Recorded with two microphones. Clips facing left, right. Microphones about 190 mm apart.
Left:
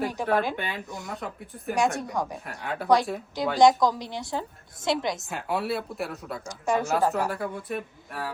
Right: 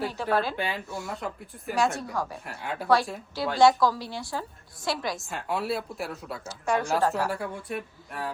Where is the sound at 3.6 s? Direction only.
20° left (ahead or behind).